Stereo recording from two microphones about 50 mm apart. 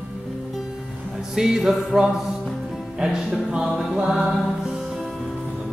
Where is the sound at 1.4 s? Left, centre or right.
Centre.